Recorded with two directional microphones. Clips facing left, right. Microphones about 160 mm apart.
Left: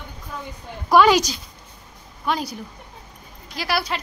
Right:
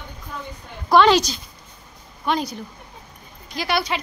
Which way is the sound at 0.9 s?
10° left (ahead or behind).